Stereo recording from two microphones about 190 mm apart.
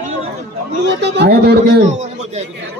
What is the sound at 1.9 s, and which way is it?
Speech, 40° right (ahead or behind).